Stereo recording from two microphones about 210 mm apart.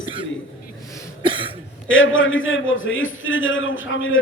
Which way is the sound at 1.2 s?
25° right (ahead or behind).